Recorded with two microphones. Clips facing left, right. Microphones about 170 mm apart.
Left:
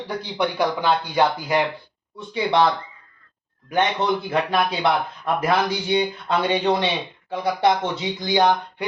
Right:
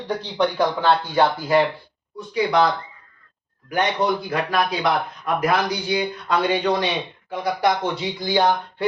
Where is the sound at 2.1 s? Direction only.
25° left (ahead or behind).